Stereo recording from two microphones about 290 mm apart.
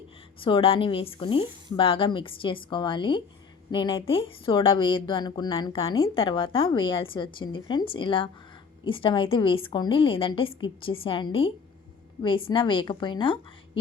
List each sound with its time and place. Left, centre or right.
0.3 s a woman's voice: centre